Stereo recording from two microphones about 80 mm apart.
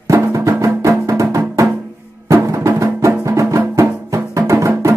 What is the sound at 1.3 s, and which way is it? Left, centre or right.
Drum, right.